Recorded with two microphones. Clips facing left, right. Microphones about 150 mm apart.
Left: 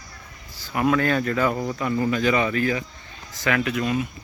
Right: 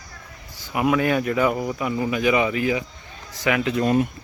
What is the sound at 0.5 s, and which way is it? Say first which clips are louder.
Speech: even; 15° right (ahead or behind).